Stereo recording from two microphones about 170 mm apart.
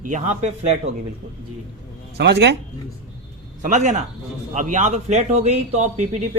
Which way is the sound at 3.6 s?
45° right (ahead or behind).